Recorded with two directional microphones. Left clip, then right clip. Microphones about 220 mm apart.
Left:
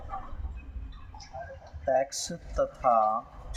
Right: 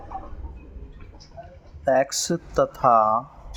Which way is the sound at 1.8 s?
40° right (ahead or behind).